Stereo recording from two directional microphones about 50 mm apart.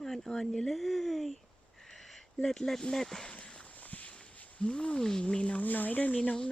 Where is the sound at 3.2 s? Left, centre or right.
Left.